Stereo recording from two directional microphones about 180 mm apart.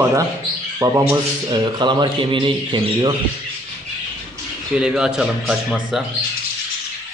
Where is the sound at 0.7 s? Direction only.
15° right (ahead or behind).